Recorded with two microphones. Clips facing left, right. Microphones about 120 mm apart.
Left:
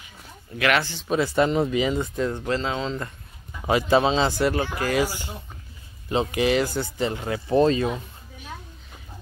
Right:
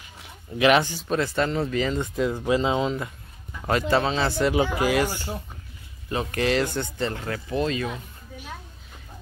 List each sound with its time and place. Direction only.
0.6 s speech: 20° right (ahead or behind)
1.0 s speech: 10° left (ahead or behind)
2.0 s speech: 5° right (ahead or behind)
3.6 s speech: 10° left (ahead or behind)
4.0 s speech: 20° left (ahead or behind)
4.6 s speech: 15° right (ahead or behind)
5.0 s speech: 15° left (ahead or behind)
6.3 s speech: 5° left (ahead or behind)
7.4 s speech: 35° left (ahead or behind)